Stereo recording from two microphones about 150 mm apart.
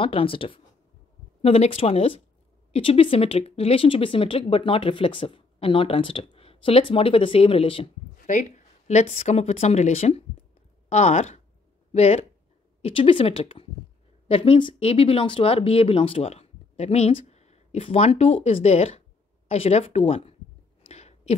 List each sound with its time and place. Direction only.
0.0 s speech: 35° left (ahead or behind)
8.3 s speech: 55° left (ahead or behind)
20.8 s a sound: 45° left (ahead or behind)